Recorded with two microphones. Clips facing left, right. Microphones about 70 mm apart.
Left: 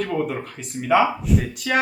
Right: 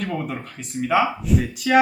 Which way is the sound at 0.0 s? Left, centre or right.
Centre.